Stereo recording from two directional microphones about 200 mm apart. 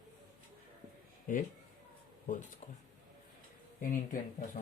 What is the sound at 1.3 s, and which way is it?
Speech, 40° left (ahead or behind).